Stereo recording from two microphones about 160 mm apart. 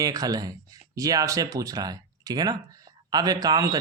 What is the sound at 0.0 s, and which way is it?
Speech, 25° right (ahead or behind).